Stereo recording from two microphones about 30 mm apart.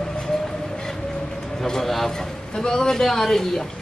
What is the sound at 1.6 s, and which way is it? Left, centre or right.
A man's voice, centre.